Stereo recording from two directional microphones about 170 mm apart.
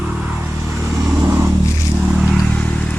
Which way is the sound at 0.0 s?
5° right (ahead or behind).